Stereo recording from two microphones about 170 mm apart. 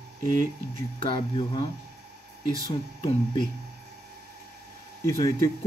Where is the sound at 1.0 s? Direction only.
30° left (ahead or behind).